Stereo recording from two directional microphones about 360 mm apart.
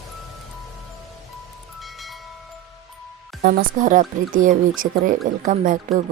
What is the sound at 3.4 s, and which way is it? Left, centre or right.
Speech, right.